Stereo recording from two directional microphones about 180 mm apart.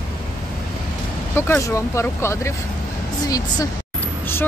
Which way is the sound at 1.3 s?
15° left (ahead or behind).